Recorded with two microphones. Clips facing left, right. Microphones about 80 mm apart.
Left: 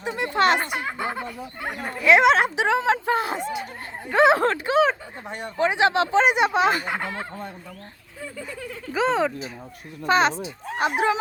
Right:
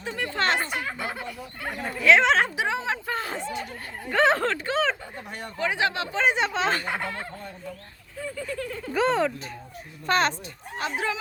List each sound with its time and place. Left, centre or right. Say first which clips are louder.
0.0 s speech: left 6 dB; centre
1.6 s speech: even; centre
2.6 s speech: left 6 dB; left
3.1 s speech: left 6 dB; centre
5.3 s speech: left 6 dB; left
6.3 s speech: left 5 dB; centre
8.7 s speech: left 1 dB; centre
10.8 s speech: left 7 dB; centre